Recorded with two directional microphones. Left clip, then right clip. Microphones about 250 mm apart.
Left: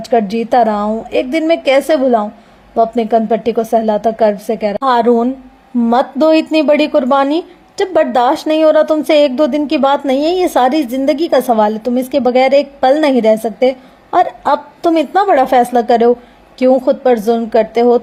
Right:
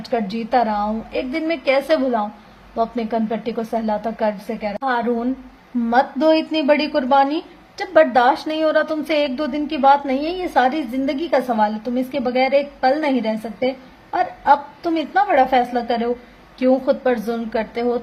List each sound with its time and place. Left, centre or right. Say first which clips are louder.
0.0 s a woman's voice: left 10 dB; left